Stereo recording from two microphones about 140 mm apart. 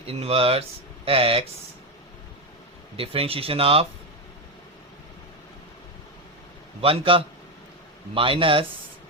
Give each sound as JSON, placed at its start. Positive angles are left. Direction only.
{"t": 0.0, "sound": "speech", "side_deg": -45}
{"t": 2.9, "sound": "speech", "side_deg": -40}
{"t": 6.8, "sound": "speech", "side_deg": -40}